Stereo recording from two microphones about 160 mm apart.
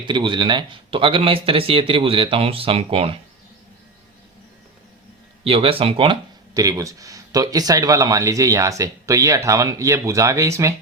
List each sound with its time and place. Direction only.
0.0 s speech: 30° right (ahead or behind)
5.4 s speech: 35° right (ahead or behind)
6.5 s speech: 20° right (ahead or behind)